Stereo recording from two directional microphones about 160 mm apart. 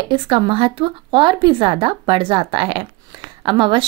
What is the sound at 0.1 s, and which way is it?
A woman's voice, 30° right (ahead or behind).